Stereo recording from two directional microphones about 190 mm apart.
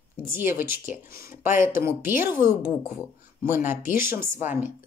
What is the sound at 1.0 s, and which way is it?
Speech, 50° left (ahead or behind).